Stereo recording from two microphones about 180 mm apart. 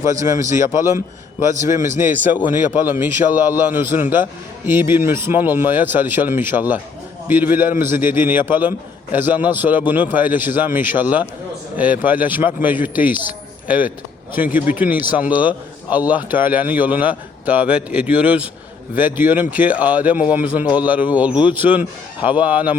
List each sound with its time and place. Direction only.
0.1 s a man's voice: 15° right (ahead or behind)